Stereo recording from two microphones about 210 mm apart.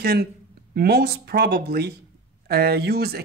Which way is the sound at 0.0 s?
50° right (ahead or behind).